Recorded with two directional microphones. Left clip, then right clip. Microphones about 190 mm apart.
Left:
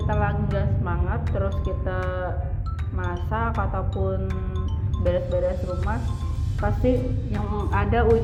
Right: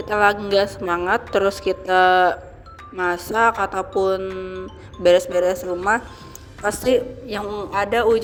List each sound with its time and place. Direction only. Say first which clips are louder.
0.2 s a woman's voice: right 11 dB; 50° right (ahead or behind)